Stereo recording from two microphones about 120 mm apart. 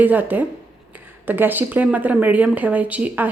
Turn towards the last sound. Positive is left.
turn(degrees=-15)  # may be behind; listen again after turning